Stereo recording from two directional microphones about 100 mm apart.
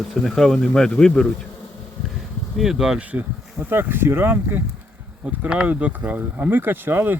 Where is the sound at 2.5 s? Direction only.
5° right (ahead or behind); by 4.6 s 20° right (ahead or behind).